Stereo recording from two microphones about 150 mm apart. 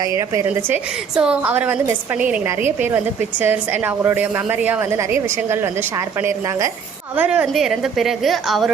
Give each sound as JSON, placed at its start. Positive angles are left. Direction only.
{"t": 0.2, "sound": "a woman's voice", "side_deg": -20}
{"t": 1.1, "sound": "a woman's voice", "side_deg": -5}
{"t": 7.2, "sound": "a woman's voice", "side_deg": -5}